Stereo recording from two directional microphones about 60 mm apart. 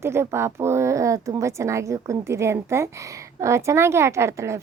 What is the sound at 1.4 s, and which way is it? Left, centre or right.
A woman's voice, right.